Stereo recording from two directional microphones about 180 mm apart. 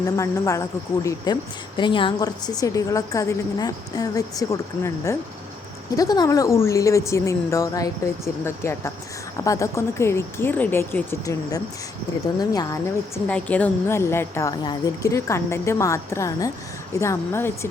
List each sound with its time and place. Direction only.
0.0 s a woman's voice: 15° left (ahead or behind)
13.2 s a woman's voice: 10° left (ahead or behind)